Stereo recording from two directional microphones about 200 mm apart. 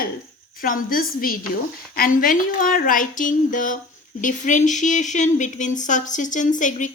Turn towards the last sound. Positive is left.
turn(degrees=40)  # may be behind; listen again after turning